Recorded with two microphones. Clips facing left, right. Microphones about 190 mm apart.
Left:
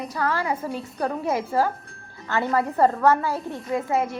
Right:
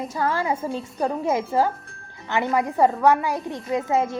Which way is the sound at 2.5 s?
15° right (ahead or behind).